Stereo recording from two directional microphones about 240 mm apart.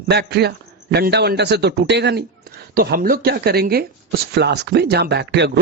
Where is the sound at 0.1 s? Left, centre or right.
Right.